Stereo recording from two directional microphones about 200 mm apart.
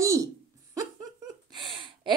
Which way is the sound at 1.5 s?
25° right (ahead or behind).